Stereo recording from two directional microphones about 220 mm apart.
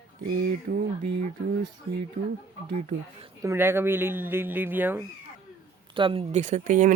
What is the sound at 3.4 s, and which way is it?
Speech, 10° right (ahead or behind).